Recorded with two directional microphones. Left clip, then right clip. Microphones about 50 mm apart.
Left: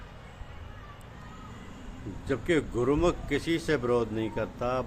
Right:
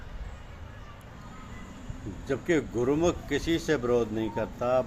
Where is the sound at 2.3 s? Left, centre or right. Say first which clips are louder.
Even; left.